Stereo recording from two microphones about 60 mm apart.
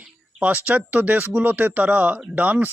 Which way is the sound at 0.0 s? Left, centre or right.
Right.